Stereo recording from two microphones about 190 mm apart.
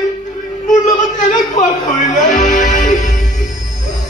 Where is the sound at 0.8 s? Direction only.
30° left (ahead or behind).